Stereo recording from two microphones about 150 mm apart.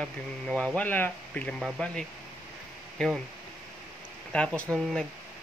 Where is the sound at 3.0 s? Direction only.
5° left (ahead or behind).